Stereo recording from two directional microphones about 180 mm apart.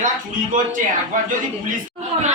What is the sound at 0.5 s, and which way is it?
Speech, 45° right (ahead or behind).